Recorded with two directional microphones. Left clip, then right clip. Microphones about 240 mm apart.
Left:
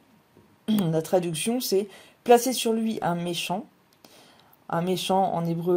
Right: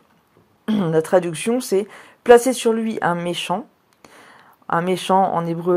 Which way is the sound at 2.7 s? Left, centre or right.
Right.